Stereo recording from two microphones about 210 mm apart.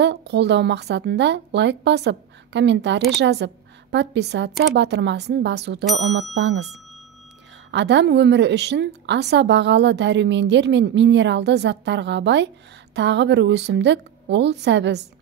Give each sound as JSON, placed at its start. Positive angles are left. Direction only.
{"t": 0.0, "sound": "a woman's voice", "side_deg": -55}
{"t": 7.7, "sound": "a woman's voice", "side_deg": -55}